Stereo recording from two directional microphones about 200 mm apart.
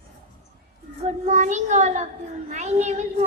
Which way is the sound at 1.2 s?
40° right (ahead or behind).